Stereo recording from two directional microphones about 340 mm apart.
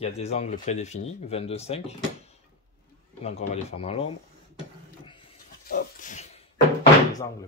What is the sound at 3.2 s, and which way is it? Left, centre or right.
Speech, centre.